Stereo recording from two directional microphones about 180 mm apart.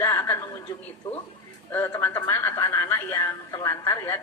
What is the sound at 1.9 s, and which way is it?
A woman's voice, 15° left (ahead or behind).